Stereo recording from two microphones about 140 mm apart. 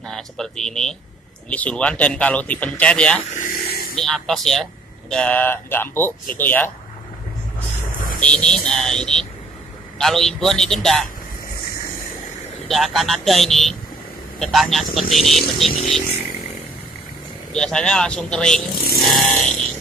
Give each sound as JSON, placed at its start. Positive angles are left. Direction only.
{"t": 0.0, "sound": "speech", "side_deg": 5}
{"t": 3.3, "sound": "a sound", "side_deg": 85}
{"t": 3.9, "sound": "speech", "side_deg": 5}
{"t": 8.2, "sound": "speech", "side_deg": 5}
{"t": 12.6, "sound": "speech", "side_deg": 0}
{"t": 17.5, "sound": "speech", "side_deg": 5}